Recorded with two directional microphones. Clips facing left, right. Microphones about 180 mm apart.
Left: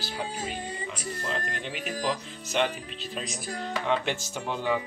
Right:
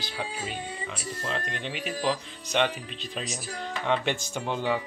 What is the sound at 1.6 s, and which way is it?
Speech, 45° left (ahead or behind).